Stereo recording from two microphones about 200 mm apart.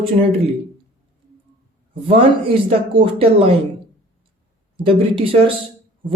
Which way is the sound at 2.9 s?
25° right (ahead or behind).